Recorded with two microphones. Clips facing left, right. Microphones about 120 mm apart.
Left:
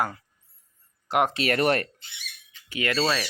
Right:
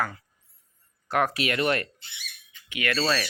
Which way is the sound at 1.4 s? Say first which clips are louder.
Left 3 dB; 40° left (ahead or behind).